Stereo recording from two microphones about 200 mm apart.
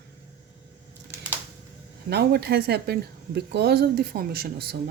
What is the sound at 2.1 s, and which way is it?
Speech, 55° right (ahead or behind).